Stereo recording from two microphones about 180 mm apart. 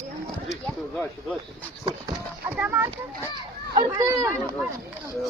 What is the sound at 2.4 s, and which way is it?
Speech, 10° right (ahead or behind).